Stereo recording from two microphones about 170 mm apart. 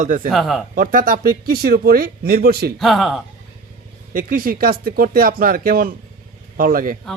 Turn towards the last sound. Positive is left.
turn(degrees=-55)  # may be behind; listen again after turning